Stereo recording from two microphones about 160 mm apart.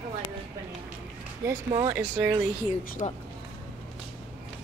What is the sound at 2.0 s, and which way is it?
Speech, 10° right (ahead or behind).